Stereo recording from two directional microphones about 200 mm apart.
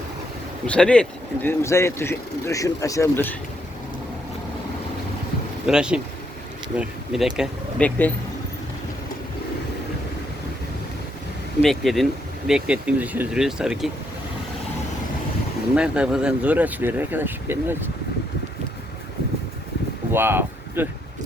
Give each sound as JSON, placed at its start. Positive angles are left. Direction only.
{"t": 0.7, "sound": "speech", "side_deg": 5}
{"t": 5.6, "sound": "speech", "side_deg": -5}
{"t": 11.6, "sound": "speech", "side_deg": 0}
{"t": 15.7, "sound": "speech", "side_deg": -5}
{"t": 20.1, "sound": "speech", "side_deg": -10}